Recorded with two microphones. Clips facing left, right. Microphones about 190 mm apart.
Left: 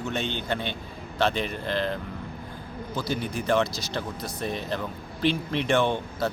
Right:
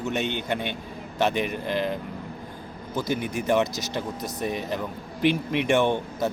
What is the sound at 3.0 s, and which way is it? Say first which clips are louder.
A man's voice: right 3 dB; 15° right (ahead or behind).